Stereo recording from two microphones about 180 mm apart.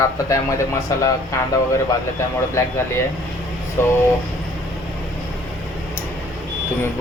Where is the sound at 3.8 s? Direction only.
15° left (ahead or behind).